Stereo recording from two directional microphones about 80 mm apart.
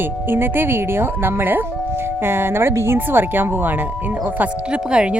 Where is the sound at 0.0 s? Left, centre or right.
Right.